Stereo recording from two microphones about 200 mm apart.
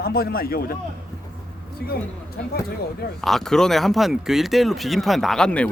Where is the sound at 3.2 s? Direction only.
Centre (ahead or behind).